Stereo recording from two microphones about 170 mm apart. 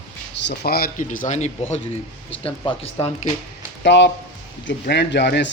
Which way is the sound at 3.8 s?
90° left.